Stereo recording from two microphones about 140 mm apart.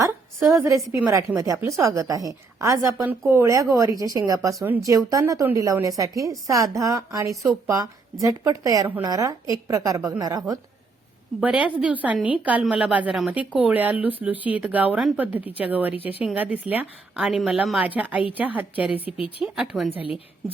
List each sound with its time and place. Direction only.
0.0 s a woman's voice: 20° right (ahead or behind)
11.3 s speech: 10° right (ahead or behind)
19.5 s a woman's voice: centre (ahead or behind)
20.0 s a woman's voice: 40° left (ahead or behind)